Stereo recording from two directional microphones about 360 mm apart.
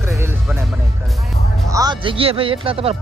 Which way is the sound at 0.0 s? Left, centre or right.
Centre.